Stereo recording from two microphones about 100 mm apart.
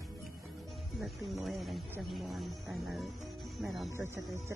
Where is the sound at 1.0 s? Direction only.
Centre (ahead or behind).